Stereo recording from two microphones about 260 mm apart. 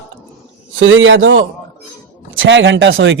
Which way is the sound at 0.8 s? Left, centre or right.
Right.